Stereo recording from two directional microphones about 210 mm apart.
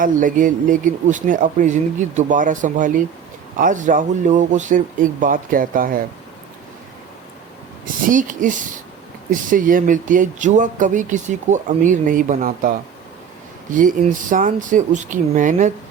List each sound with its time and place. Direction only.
0.0 s speech: 40° right (ahead or behind)
7.9 s speech: 40° right (ahead or behind)
13.7 s speech: 40° right (ahead or behind)